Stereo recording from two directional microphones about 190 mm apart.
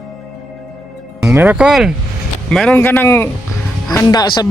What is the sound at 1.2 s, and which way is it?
Speech, 10° right (ahead or behind).